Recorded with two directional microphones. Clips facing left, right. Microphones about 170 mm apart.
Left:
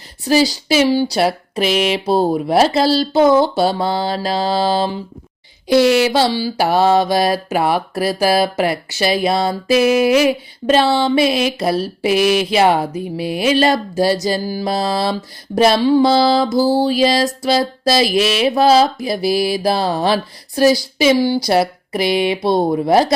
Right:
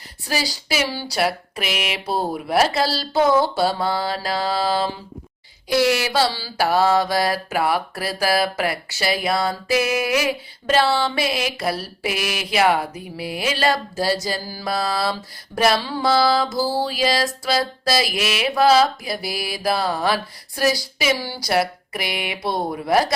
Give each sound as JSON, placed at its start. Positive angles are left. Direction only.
{"t": 0.3, "sound": "mantra", "side_deg": 25}